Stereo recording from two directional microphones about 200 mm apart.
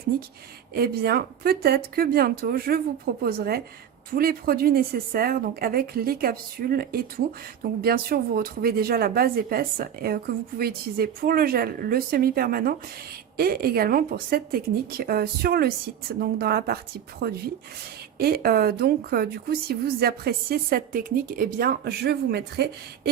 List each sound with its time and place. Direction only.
0.7 s a woman's voice: 50° right (ahead or behind)